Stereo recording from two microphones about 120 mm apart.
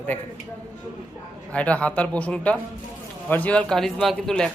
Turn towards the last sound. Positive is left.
turn(degrees=5)  # may be behind; listen again after turning